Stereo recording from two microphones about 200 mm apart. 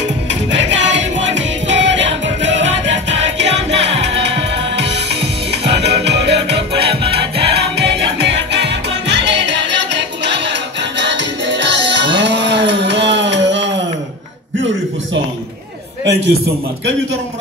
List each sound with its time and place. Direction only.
0.3 s music: 65° right (ahead or behind)